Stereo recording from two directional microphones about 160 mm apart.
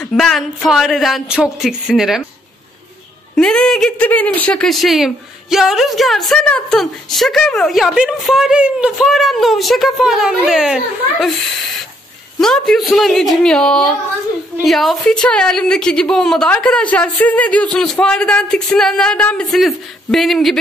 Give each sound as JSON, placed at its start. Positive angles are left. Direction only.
{"t": 0.0, "sound": "speech", "side_deg": 0}
{"t": 3.3, "sound": "speech", "side_deg": 5}